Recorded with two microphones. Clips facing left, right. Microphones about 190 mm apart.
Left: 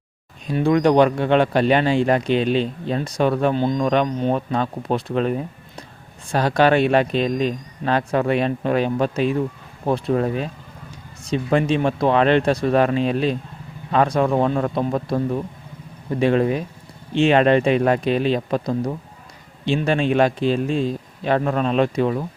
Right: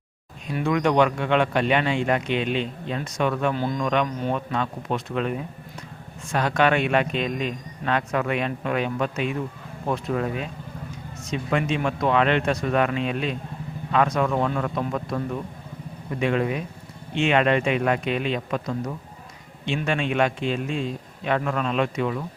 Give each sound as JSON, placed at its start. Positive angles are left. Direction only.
{"t": 0.4, "sound": "speech", "side_deg": 35}